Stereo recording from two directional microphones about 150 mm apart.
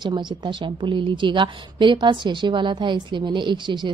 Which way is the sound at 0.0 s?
30° right (ahead or behind).